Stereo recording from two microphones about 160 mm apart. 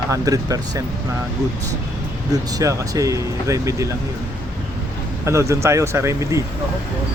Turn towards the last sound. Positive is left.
turn(degrees=-20)  # may be behind; listen again after turning